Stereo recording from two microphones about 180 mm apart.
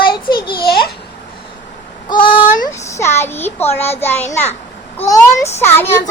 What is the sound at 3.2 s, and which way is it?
A child's voice, 10° left (ahead or behind).